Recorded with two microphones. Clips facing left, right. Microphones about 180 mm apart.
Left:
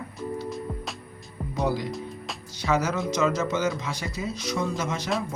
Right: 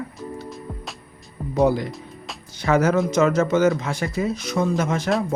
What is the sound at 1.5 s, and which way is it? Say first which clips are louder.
Speech: right 8 dB; 55° right (ahead or behind).